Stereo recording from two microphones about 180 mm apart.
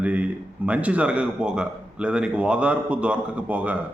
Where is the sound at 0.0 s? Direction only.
10° right (ahead or behind).